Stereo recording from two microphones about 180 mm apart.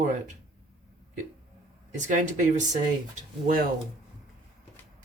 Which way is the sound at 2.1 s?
45° right (ahead or behind).